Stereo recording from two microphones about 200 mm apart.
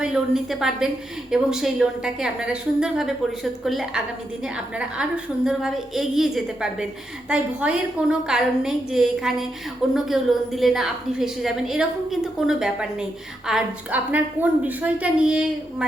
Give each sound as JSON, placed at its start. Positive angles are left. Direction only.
{"t": 0.0, "sound": "a woman's voice", "side_deg": -5}